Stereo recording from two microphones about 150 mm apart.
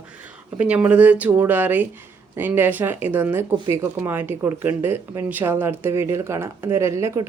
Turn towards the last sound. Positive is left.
turn(degrees=-20)  # may be behind; listen again after turning